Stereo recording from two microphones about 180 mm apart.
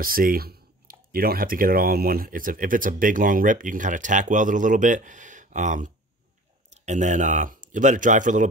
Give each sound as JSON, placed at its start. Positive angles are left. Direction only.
{"t": 0.0, "sound": "speech", "side_deg": -50}